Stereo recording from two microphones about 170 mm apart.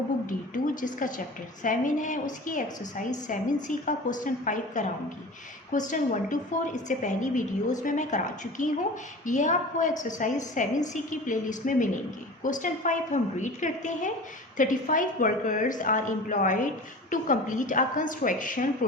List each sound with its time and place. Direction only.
0.3 s a woman's voice: 50° left (ahead or behind)